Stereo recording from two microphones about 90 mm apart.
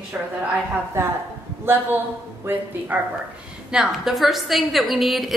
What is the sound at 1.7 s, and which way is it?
Speech, 25° right (ahead or behind).